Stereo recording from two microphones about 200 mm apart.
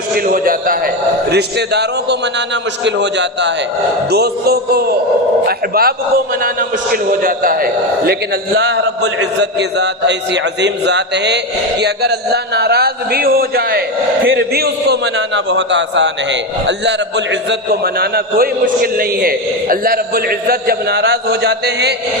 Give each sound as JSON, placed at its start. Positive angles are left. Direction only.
{"t": 0.3, "sound": "a man's voice", "side_deg": -45}
{"t": 1.3, "sound": "a man's voice", "side_deg": -55}